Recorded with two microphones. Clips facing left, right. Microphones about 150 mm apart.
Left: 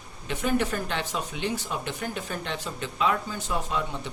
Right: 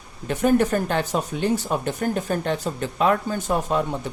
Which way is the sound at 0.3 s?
45° right (ahead or behind).